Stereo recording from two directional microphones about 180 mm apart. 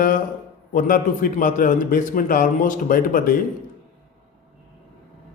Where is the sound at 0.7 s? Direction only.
45° left (ahead or behind).